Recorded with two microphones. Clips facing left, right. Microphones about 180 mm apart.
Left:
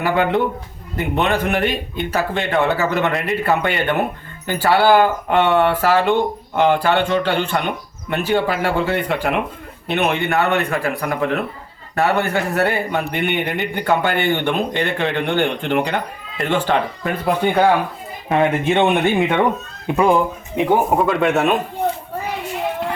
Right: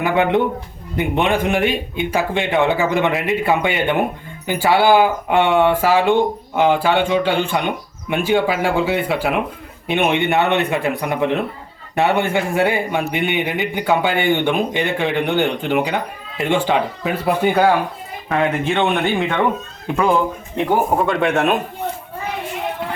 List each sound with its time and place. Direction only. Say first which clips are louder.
0.0 s speech: right 1 dB; 15° right (ahead or behind); by 3.5 s centre (ahead or behind)
3.5 s speech: even; 15° right (ahead or behind)
18.3 s speech: left 2 dB; 20° left (ahead or behind)
20.7 s speech: left 1 dB; centre (ahead or behind)